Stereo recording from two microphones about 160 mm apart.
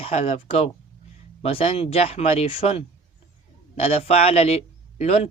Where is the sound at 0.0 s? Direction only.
40° left (ahead or behind).